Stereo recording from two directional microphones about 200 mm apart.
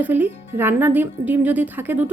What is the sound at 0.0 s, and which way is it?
Speech, 10° right (ahead or behind).